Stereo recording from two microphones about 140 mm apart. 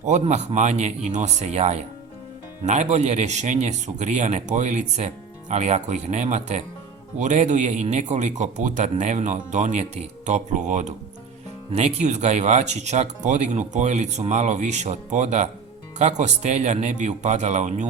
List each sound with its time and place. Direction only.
0.0 s speech: 55° right (ahead or behind)